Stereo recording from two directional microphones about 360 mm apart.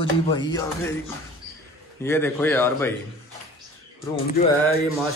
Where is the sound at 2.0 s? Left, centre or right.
Centre.